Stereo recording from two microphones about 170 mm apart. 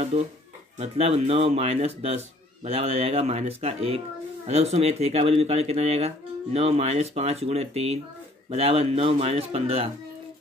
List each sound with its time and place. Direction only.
0.1 s speech: 40° right (ahead or behind)